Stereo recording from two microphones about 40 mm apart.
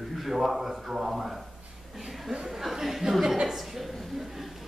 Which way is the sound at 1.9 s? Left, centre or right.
Centre.